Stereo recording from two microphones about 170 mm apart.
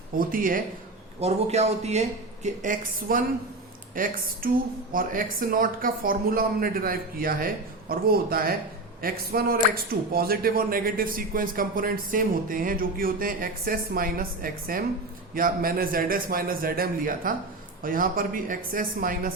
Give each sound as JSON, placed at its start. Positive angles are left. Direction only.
{"t": 0.2, "sound": "speech", "side_deg": -55}
{"t": 1.2, "sound": "speech", "side_deg": -40}